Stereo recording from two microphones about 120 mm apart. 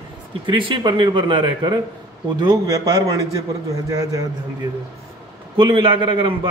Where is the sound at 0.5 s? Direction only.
45° right (ahead or behind); by 4.3 s 30° right (ahead or behind).